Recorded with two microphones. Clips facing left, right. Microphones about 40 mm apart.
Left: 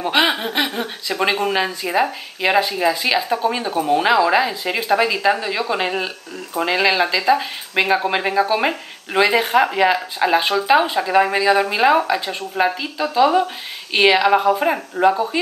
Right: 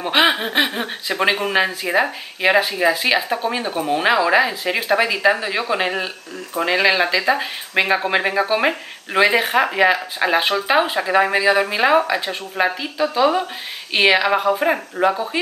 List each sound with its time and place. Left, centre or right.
0.0 s speech: centre
3.3 s speech: centre